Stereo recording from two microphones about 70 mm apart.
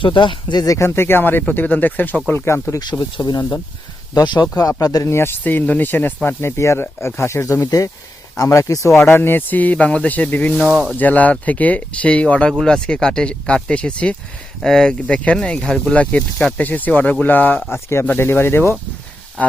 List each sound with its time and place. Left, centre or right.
0.4 s speech: left
0.7 s speech: left
2.3 s speech: left
3.0 s speech: left
4.1 s speech: left
4.8 s speech: left
5.0 s speech: left
5.4 s speech: left
6.2 s speech: left
9.0 s speech: left
17.7 s speech: left
19.4 s speech: centre